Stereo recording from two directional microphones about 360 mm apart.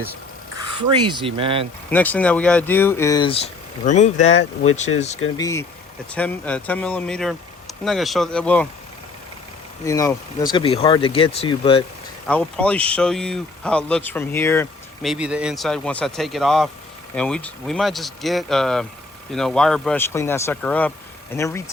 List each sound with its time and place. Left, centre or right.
0.8 s speech: centre
1.9 s speech: centre
5.4 s speech: centre
9.8 s speech: centre
12.3 s speech: centre